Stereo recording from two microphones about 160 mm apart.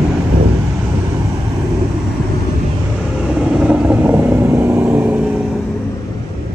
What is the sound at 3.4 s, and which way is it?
Vehicle, 5° right (ahead or behind).